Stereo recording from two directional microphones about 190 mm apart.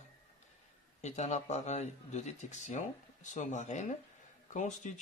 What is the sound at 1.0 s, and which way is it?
Speech, 35° left (ahead or behind).